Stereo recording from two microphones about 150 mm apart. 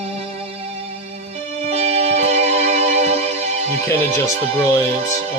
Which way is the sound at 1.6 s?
45° right (ahead or behind).